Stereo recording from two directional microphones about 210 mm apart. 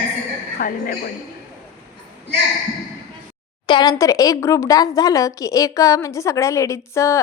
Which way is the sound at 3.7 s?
20° left (ahead or behind).